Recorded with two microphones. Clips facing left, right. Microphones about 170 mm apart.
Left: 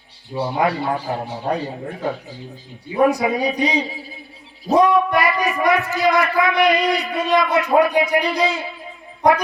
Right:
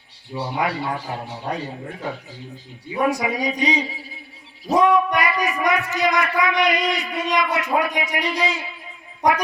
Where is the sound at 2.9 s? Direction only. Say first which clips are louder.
Left 5 dB; 30° left (ahead or behind).